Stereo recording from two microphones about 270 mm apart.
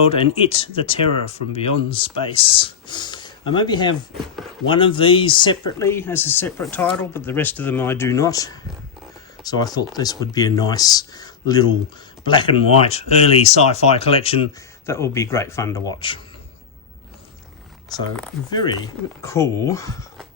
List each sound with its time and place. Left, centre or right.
0.0 s speech: left
9.4 s a sound: centre
9.7 s speech: centre
14.8 s speech: centre
19.2 s speech: centre